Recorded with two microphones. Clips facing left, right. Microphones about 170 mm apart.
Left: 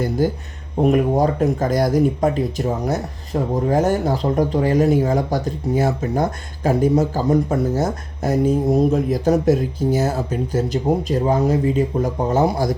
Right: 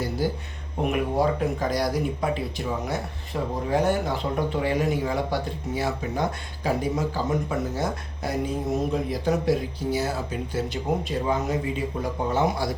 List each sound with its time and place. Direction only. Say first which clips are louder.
0.2 s speech: left 6 dB; 50° left (ahead or behind)